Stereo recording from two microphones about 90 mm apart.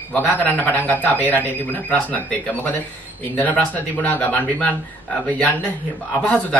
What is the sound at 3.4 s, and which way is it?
Speech, 15° left (ahead or behind).